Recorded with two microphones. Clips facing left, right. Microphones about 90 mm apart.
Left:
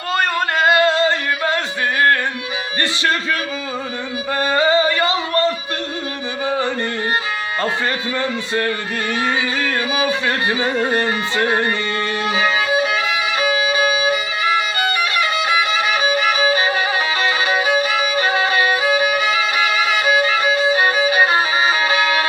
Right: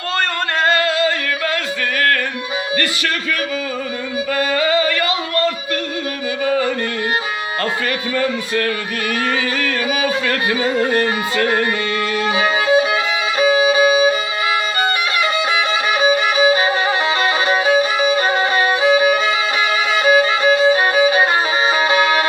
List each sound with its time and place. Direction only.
0.8 s yodeling: 30° left (ahead or behind)
4.4 s music: 30° left (ahead or behind)
8.1 s music: 25° left (ahead or behind)
12.3 s violin: 15° right (ahead or behind)
13.4 s music: 30° right (ahead or behind)
16.0 s violin: 30° right (ahead or behind)
18.0 s violin: 30° right (ahead or behind)
21.8 s music: 25° right (ahead or behind)